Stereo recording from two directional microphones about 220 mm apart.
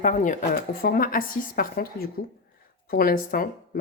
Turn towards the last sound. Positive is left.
turn(degrees=40)  # may be behind; listen again after turning